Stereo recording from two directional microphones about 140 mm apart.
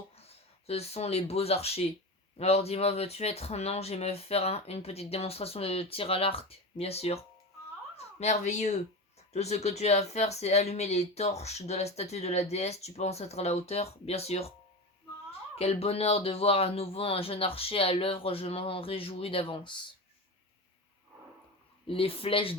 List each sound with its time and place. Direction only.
0.2 s speech: 45° left (ahead or behind)
15.5 s speech: 45° left (ahead or behind)
21.8 s speech: 40° left (ahead or behind)